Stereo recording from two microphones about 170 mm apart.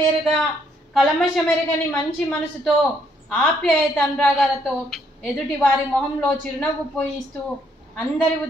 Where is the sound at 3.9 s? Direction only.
Centre (ahead or behind).